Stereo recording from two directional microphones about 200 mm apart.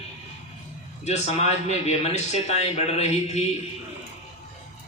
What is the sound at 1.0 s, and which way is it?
Speech, 35° left (ahead or behind).